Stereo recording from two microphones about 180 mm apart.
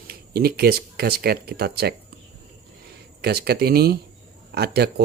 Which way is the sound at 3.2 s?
65° right (ahead or behind).